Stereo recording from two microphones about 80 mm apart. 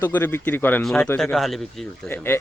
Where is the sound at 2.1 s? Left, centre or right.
Left.